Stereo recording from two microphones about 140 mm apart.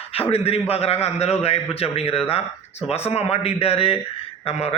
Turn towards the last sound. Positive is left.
turn(degrees=50)  # may be behind; listen again after turning